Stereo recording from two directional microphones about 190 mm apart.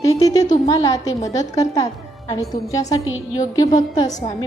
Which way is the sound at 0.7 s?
20° left (ahead or behind).